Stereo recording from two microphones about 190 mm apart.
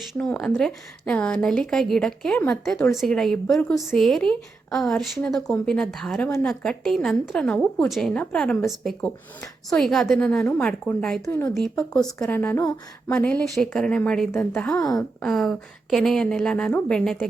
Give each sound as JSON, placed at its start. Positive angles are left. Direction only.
{"t": 0.0, "sound": "a woman's voice", "side_deg": 0}
{"t": 11.5, "sound": "a woman's voice", "side_deg": 0}
{"t": 14.8, "sound": "speech", "side_deg": 20}
{"t": 15.2, "sound": "a woman's voice", "side_deg": 0}